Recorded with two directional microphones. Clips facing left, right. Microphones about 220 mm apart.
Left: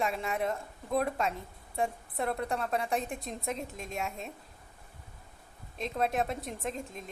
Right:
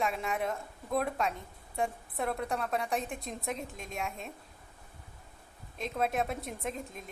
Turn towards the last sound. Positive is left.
turn(degrees=0)  # may be behind; listen again after turning